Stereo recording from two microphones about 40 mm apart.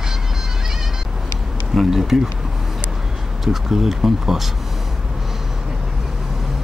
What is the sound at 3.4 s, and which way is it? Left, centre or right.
Speech, centre.